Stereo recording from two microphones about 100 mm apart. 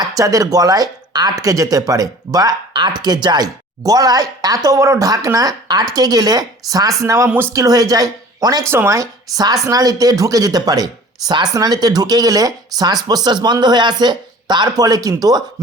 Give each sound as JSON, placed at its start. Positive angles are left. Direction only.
{"t": 0.0, "sound": "speech", "side_deg": -35}
{"t": 8.6, "sound": "speech", "side_deg": -25}